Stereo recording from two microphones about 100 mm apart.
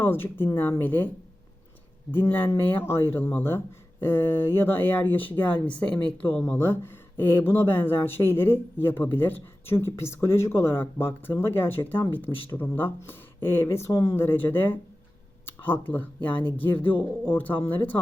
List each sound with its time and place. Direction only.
0.0 s speech: 20° left (ahead or behind)
2.1 s speech: 20° left (ahead or behind)